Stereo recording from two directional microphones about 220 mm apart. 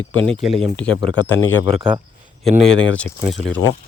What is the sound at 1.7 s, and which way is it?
Speech, 20° right (ahead or behind).